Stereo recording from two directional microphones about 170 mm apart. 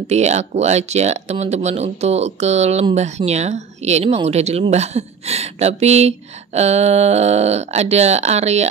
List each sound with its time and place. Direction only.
0.1 s speech: 40° right (ahead or behind)